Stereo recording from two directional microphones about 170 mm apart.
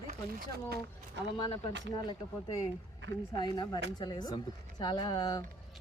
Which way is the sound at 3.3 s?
25° left (ahead or behind).